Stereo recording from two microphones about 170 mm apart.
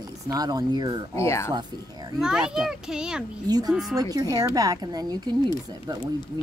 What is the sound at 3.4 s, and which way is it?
Speech, 20° right (ahead or behind).